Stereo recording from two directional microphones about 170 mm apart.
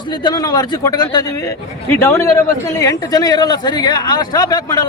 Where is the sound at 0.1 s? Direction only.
25° left (ahead or behind).